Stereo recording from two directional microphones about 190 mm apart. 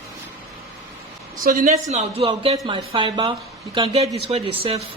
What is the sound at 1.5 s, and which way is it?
Speech, 50° right (ahead or behind).